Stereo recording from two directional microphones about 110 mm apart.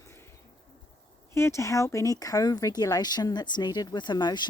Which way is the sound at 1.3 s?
25° left (ahead or behind).